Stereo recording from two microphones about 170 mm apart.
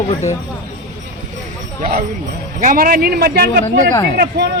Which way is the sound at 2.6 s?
55° right (ahead or behind).